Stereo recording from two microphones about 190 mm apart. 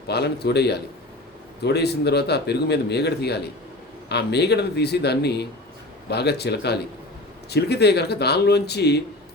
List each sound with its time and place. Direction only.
0.1 s speech: 60° left (ahead or behind)